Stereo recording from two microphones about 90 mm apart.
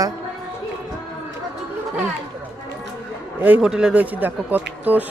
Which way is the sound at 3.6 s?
5° right (ahead or behind).